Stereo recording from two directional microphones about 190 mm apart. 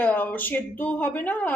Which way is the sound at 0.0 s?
10° left (ahead or behind).